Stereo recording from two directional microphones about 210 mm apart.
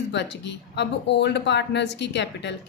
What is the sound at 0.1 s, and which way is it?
A woman's voice, 55° left (ahead or behind).